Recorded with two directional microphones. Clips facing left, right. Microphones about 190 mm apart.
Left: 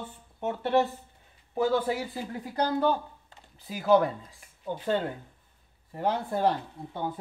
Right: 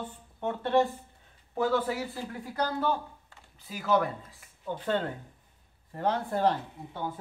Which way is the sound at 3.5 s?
35° left (ahead or behind).